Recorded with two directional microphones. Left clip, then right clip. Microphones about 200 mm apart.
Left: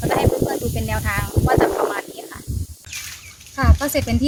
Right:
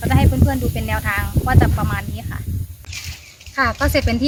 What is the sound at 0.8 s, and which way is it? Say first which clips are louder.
Speech: right 2 dB; 10° left (ahead or behind).